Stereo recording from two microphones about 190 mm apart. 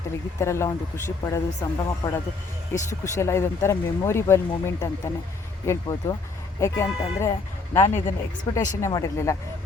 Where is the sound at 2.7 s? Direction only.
15° left (ahead or behind).